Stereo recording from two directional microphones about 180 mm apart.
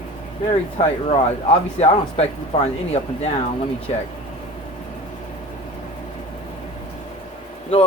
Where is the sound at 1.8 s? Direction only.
35° left (ahead or behind).